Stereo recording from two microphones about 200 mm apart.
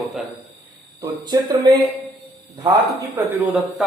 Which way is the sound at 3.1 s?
10° right (ahead or behind).